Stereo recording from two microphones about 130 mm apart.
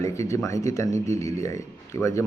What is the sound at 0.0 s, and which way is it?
Speech, 20° left (ahead or behind).